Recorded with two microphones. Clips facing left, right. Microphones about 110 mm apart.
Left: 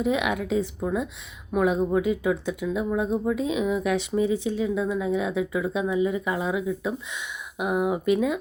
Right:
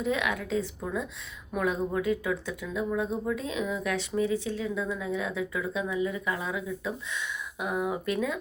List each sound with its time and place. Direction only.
0.0 s speech: 15° left (ahead or behind)